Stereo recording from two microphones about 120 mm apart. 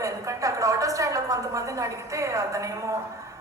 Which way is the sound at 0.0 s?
25° right (ahead or behind).